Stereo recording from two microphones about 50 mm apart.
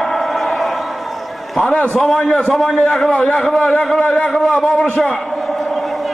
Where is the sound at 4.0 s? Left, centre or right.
Left.